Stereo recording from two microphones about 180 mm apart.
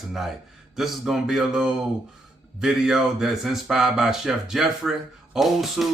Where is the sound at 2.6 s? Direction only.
5° right (ahead or behind).